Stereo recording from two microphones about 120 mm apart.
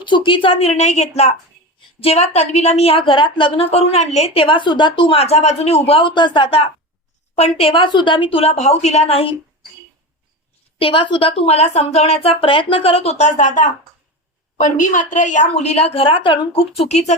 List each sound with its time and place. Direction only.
0.0 s speech: 40° left (ahead or behind); by 4.4 s 65° left (ahead or behind)
4.4 s speech: 45° left (ahead or behind)
7.3 s speech: 60° left (ahead or behind)
10.8 s speech: 50° left (ahead or behind); by 17.2 s 70° left (ahead or behind)